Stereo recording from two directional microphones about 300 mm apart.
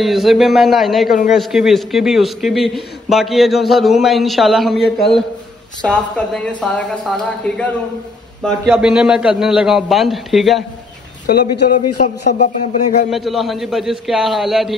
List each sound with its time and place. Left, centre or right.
0.0 s a man's voice: centre
8.6 s a man's voice: centre
11.2 s speech: left
13.1 s a man's voice: centre